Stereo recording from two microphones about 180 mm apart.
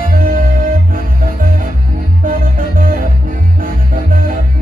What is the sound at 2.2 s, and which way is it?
Music, 50° right (ahead or behind).